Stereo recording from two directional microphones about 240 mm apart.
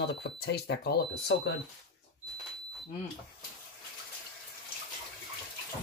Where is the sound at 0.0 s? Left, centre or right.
Left.